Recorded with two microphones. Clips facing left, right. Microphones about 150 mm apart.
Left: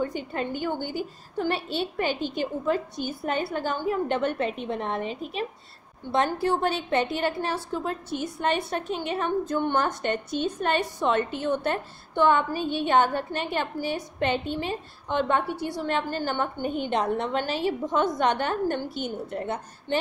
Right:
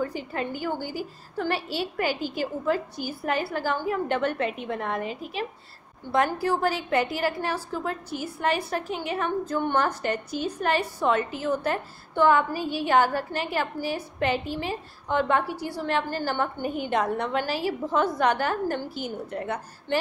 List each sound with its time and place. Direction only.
0.0 s a woman's voice: 20° left (ahead or behind)